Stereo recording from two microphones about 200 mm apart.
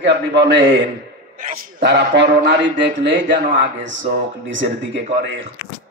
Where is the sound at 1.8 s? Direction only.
60° right (ahead or behind).